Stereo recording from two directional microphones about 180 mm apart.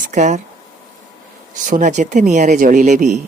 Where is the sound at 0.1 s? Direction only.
40° right (ahead or behind).